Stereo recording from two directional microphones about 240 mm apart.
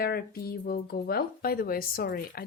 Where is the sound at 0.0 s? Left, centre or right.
Left.